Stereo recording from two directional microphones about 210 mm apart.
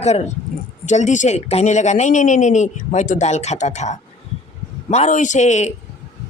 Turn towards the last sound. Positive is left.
turn(degrees=35)  # may be behind; listen again after turning